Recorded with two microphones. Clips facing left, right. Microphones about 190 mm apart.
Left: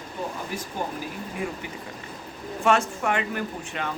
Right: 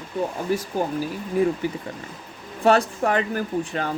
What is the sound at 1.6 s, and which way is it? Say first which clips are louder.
Speech: right 8 dB; 35° right (ahead or behind).